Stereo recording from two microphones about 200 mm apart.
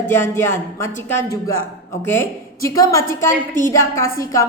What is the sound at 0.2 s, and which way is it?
A woman's voice, 10° left (ahead or behind).